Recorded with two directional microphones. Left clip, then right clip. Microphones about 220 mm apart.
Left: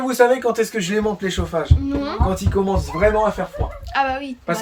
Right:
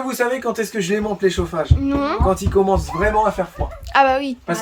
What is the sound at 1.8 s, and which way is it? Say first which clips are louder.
Speech: right 4 dB; 15° right (ahead or behind).